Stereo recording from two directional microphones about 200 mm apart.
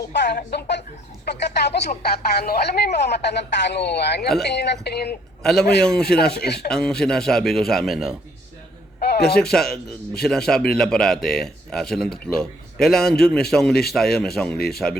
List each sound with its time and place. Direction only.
0.1 s speech: 60° left (ahead or behind)
5.4 s a man's voice: centre (ahead or behind)
6.4 s speech: 55° left (ahead or behind)
6.7 s a man's voice: 5° left (ahead or behind)
9.0 s a sound: 55° left (ahead or behind)
9.4 s a man's voice: centre (ahead or behind)